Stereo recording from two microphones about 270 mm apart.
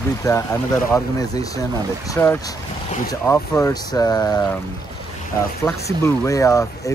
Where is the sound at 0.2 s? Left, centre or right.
Centre.